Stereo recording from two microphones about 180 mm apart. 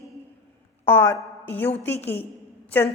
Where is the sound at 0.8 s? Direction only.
10° left (ahead or behind).